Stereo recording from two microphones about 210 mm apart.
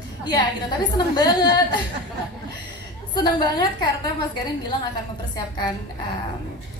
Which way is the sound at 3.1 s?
20° left (ahead or behind).